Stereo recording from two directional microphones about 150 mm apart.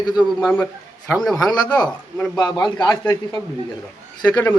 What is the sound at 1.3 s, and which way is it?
A man's voice, 25° left (ahead or behind).